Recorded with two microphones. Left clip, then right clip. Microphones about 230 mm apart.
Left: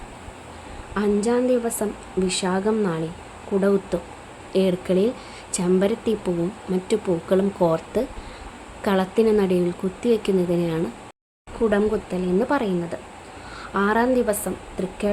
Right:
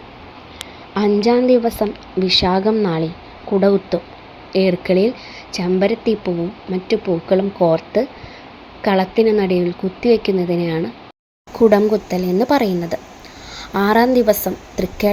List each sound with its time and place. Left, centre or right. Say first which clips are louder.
0.9 s a woman's voice: right 6 dB; centre
11.7 s speech: right 7 dB; centre